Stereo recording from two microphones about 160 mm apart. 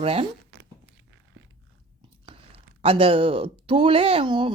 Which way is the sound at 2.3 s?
35° right (ahead or behind).